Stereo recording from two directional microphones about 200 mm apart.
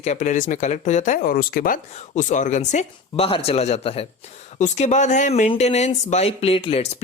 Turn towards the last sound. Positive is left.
turn(degrees=30)  # may be behind; listen again after turning